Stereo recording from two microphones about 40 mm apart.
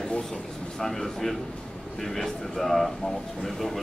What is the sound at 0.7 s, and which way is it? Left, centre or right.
A man's voice, centre.